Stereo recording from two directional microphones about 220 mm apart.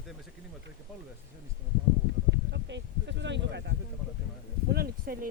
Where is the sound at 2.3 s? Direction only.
55° right (ahead or behind).